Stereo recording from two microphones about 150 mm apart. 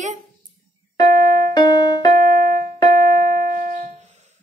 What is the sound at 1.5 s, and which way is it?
Music, 30° left (ahead or behind).